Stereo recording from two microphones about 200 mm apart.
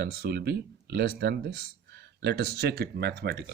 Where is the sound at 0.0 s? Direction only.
55° right (ahead or behind).